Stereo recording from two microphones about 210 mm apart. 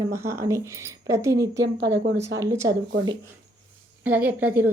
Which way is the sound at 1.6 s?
55° right (ahead or behind).